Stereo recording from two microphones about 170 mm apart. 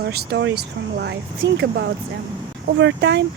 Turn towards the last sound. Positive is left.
turn(degrees=-90)